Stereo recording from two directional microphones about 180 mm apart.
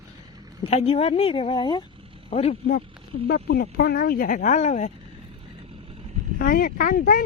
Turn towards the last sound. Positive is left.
turn(degrees=50)  # may be behind; listen again after turning